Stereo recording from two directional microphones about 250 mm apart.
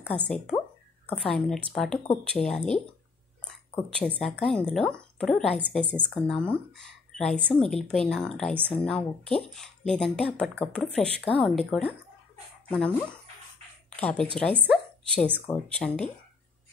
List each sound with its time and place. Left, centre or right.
0.1 s speech: left
1.0 s speech: centre
3.4 s a sound: centre
4.2 s speech: centre
13.9 s a woman's voice: centre